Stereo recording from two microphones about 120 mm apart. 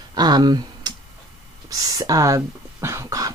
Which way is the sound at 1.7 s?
30° right (ahead or behind).